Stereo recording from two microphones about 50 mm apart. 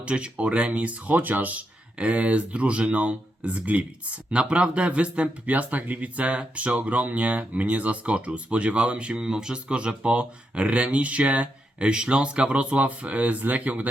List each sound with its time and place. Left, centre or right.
0.0 s speech: right